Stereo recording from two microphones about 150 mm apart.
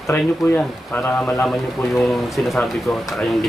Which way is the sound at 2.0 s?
Centre (ahead or behind).